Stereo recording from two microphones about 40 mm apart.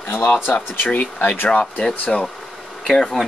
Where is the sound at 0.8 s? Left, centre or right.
Left.